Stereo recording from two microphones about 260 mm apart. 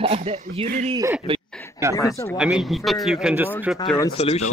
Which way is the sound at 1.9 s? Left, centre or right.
Centre.